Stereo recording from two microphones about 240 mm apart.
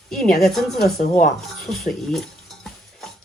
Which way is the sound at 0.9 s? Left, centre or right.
Left.